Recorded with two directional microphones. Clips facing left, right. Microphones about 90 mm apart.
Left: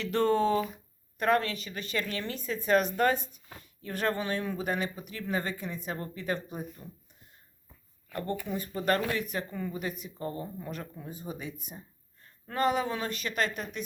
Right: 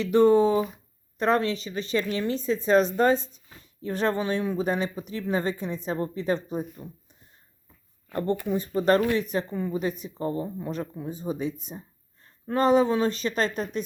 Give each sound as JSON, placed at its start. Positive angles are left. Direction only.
{"t": 0.0, "sound": "speech", "side_deg": -15}
{"t": 8.1, "sound": "speech", "side_deg": -25}